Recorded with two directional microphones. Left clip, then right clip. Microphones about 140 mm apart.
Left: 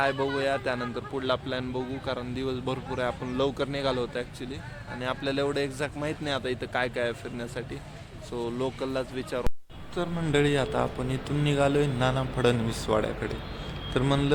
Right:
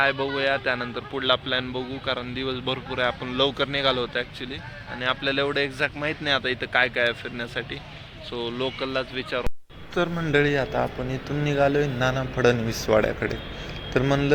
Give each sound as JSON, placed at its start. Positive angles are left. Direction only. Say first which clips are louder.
{"t": 0.3, "sound": "speech", "louder": "right 4 dB", "side_deg": 15}
{"t": 10.0, "sound": "speech", "louder": "right 7 dB", "side_deg": -15}
{"t": 10.3, "sound": "speech", "louder": "right 3 dB", "side_deg": 10}